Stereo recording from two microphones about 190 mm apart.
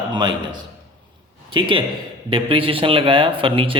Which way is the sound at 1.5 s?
25° right (ahead or behind).